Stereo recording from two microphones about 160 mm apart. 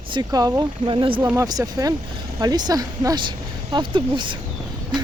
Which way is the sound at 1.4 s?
20° right (ahead or behind).